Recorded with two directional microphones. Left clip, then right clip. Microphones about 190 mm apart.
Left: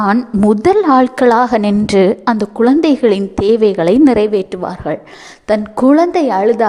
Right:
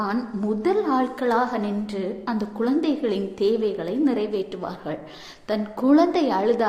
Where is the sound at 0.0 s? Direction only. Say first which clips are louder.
Left 13 dB; 50° left (ahead or behind).